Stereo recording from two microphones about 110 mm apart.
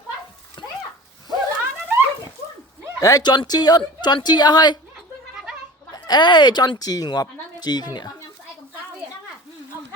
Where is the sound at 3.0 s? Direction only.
35° left (ahead or behind).